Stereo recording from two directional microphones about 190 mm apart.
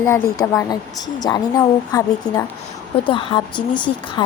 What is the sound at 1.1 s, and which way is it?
Speech, 20° left (ahead or behind).